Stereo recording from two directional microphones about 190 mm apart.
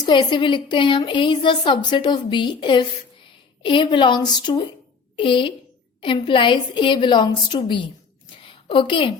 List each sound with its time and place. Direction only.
0.0 s a woman's voice: 25° left (ahead or behind)